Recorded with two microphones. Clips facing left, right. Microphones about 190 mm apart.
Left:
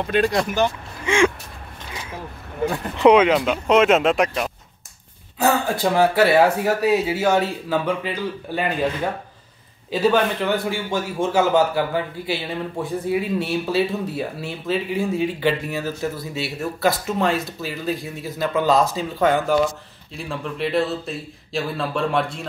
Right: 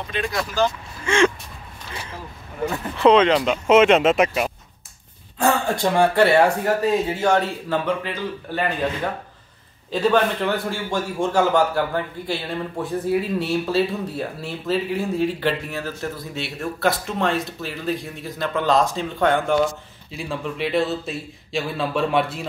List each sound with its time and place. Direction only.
0.2 s speech: 25° left (ahead or behind)
2.6 s a man's voice: 15° left (ahead or behind)
9.8 s a man's voice: 5° left (ahead or behind)